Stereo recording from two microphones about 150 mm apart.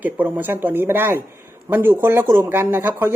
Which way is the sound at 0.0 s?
10° right (ahead or behind).